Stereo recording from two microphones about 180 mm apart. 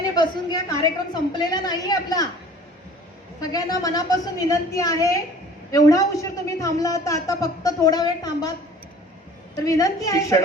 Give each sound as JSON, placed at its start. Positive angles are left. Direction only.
{"t": 0.2, "sound": "a man's voice", "side_deg": 20}
{"t": 3.4, "sound": "a man's voice", "side_deg": 20}
{"t": 9.6, "sound": "a man's voice", "side_deg": 20}